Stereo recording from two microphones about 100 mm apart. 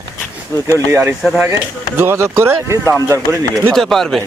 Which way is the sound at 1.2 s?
5° right (ahead or behind).